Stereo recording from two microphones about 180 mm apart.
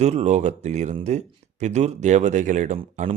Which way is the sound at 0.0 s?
35° right (ahead or behind).